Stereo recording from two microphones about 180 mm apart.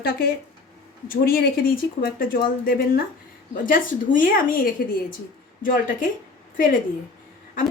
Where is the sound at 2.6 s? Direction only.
55° left (ahead or behind).